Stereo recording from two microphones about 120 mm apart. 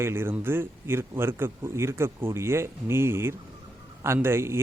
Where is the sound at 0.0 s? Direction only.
20° right (ahead or behind).